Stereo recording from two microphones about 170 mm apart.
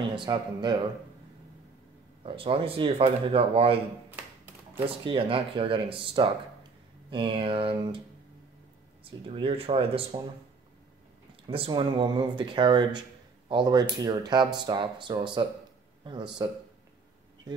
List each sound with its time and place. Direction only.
0.0 s speech: 30° right (ahead or behind)
2.2 s speech: 35° right (ahead or behind)
4.8 s speech: 30° right (ahead or behind)
9.0 s speech: 35° right (ahead or behind)
11.4 s speech: 30° right (ahead or behind)